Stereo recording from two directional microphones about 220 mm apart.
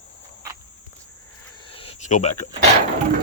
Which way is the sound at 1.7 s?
25° left (ahead or behind).